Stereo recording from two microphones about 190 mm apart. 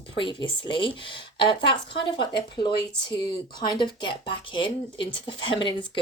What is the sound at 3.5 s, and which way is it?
Speech, 25° left (ahead or behind).